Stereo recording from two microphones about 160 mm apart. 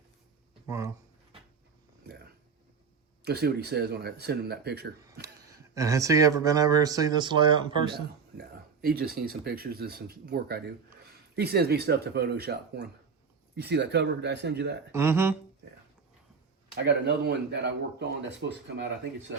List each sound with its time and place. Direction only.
3.2 s speech: 90° right
5.2 s speech: 20° right (ahead or behind)
7.9 s speech: 80° right
14.9 s speech: 15° right (ahead or behind)
16.7 s speech: 90° right